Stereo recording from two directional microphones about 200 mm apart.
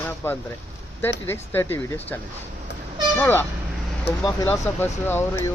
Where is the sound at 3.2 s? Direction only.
10° left (ahead or behind).